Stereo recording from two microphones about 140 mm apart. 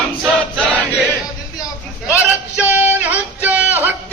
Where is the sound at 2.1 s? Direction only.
10° right (ahead or behind).